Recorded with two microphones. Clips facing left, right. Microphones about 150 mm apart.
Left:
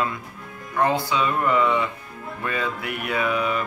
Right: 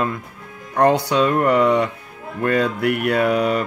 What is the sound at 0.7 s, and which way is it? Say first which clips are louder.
Speech: right 6 dB; 70° right (ahead or behind).